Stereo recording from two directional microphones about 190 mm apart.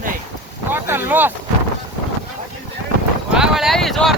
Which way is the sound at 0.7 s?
10° right (ahead or behind).